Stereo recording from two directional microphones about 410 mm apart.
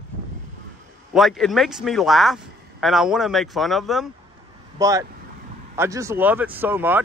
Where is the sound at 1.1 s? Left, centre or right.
Centre.